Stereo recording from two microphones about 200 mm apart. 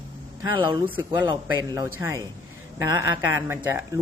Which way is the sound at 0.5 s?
25° right (ahead or behind).